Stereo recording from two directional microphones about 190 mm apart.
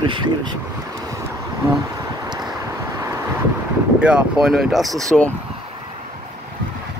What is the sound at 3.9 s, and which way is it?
Speech, 5° right (ahead or behind).